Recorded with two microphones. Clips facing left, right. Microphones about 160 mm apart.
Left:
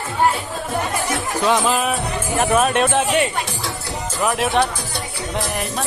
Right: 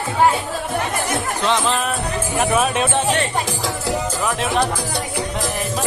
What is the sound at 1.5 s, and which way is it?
Speech, 10° left (ahead or behind).